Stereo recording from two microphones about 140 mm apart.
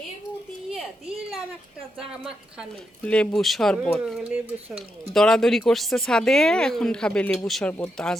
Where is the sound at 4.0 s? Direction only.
5° right (ahead or behind).